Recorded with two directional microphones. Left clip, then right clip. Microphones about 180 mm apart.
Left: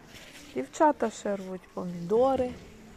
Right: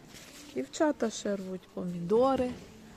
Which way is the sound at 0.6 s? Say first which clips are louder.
Left 5 dB; 20° right (ahead or behind).